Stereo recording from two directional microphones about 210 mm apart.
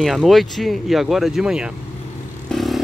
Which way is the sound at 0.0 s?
Centre (ahead or behind).